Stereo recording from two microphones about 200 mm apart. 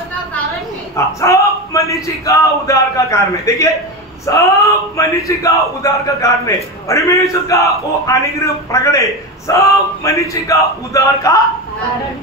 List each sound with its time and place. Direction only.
0.9 s speech: 15° left (ahead or behind)